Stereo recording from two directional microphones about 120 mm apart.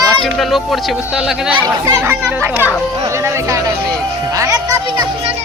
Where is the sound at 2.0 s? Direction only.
15° right (ahead or behind).